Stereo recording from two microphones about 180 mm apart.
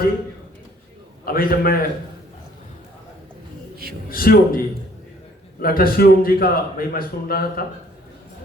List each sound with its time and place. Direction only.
1.2 s a man's voice: 55° left (ahead or behind)
4.1 s a man's voice: 55° left (ahead or behind)